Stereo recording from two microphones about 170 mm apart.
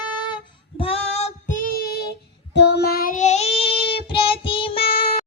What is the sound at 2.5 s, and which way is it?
Child singing, 80° left.